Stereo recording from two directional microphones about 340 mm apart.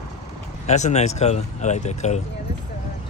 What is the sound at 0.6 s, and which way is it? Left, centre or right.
Speech, centre.